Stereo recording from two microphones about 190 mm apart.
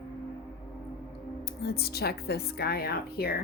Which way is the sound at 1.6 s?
55° left (ahead or behind).